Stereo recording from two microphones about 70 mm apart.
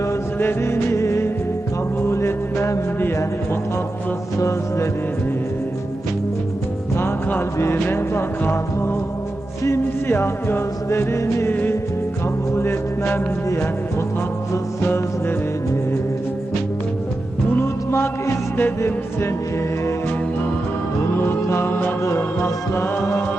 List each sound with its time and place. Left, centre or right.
0.3 s music: left
4.4 s music: left
6.9 s music: left
12.5 s music: left
17.5 s music: left
21.4 s music: left